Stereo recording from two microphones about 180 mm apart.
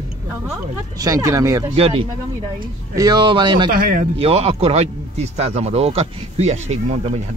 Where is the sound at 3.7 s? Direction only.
50° right (ahead or behind).